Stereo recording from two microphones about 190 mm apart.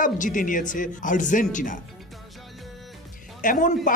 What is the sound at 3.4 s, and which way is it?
Speech, 45° left (ahead or behind).